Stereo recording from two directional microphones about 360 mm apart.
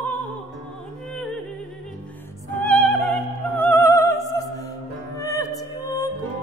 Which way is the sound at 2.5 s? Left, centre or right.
Centre.